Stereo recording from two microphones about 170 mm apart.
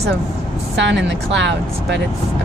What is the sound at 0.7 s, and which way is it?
A woman's voice, 90° right.